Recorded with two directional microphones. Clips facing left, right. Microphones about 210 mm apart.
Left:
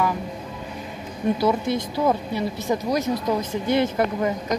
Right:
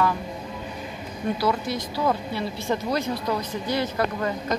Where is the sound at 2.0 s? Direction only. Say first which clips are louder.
Left 1 dB; 15° left (ahead or behind).